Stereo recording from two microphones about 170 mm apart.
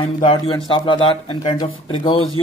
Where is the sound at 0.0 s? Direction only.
30° left (ahead or behind).